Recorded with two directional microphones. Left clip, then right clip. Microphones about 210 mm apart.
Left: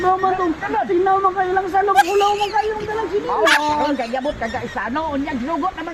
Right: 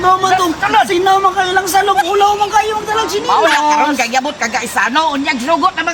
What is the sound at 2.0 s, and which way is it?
Speech, centre (ahead or behind).